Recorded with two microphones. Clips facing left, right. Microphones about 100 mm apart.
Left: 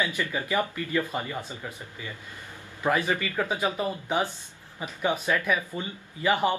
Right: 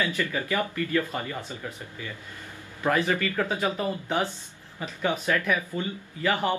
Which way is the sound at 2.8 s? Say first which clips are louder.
Right 1 dB; 15° left (ahead or behind).